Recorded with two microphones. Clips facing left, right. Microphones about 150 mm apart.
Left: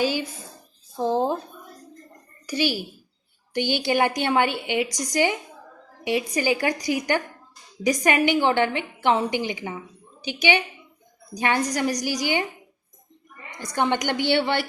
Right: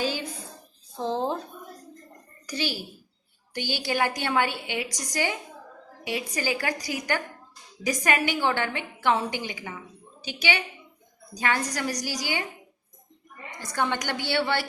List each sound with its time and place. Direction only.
0.9 s a woman's voice: 15° left (ahead or behind)
2.5 s a woman's voice: 10° left (ahead or behind)
13.6 s a woman's voice: 20° left (ahead or behind)